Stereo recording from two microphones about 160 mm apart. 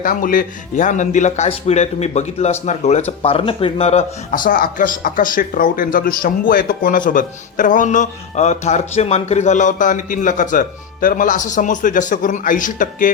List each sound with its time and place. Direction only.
0.0 s a man's voice: 60° left (ahead or behind); by 4.4 s 40° left (ahead or behind)
4.4 s speech: 65° left (ahead or behind)